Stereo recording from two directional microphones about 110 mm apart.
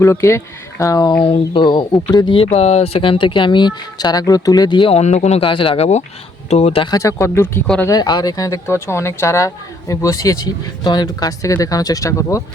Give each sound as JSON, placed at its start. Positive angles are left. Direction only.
{"t": 0.0, "sound": "speech", "side_deg": 25}
{"t": 2.4, "sound": "speech", "side_deg": 75}
{"t": 4.9, "sound": "speech", "side_deg": 90}
{"t": 5.4, "sound": "speech", "side_deg": 50}
{"t": 6.9, "sound": "speech", "side_deg": 30}
{"t": 7.9, "sound": "speech", "side_deg": 40}